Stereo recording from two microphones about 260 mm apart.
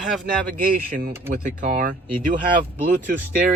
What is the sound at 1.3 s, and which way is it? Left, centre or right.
Speech, right.